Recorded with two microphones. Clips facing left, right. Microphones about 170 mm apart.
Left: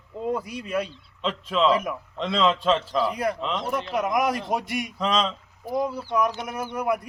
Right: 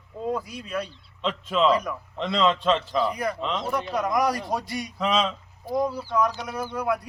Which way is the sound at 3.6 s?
20° left (ahead or behind).